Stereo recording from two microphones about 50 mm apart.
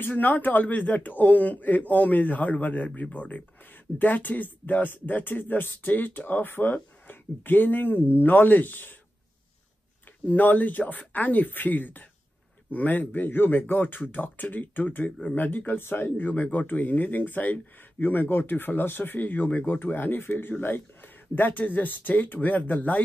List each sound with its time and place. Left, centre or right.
0.1 s speech: left
10.2 s speech: left